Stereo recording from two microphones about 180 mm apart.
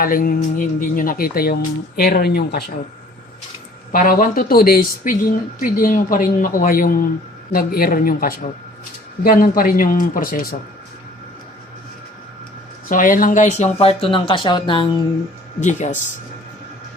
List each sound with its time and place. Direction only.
0.0 s speech: 50° left (ahead or behind)
3.9 s speech: 50° left (ahead or behind)
12.9 s speech: 50° left (ahead or behind); by 15.0 s 25° left (ahead or behind)
15.6 s speech: 40° left (ahead or behind)